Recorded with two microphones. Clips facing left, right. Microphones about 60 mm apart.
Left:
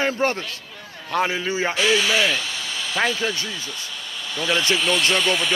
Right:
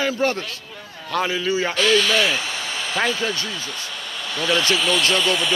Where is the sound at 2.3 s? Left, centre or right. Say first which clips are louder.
Right 1 dB; right.